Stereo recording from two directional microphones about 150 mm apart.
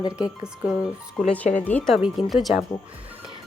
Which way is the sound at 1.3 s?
10° left (ahead or behind).